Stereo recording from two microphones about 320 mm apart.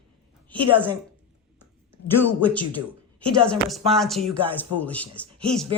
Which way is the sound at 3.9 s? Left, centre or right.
Centre.